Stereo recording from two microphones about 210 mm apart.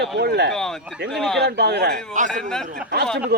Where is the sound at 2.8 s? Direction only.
50° right (ahead or behind).